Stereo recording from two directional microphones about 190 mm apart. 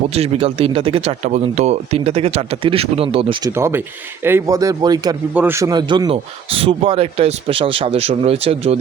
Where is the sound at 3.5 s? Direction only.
15° right (ahead or behind).